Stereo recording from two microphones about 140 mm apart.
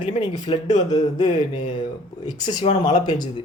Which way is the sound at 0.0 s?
35° left (ahead or behind).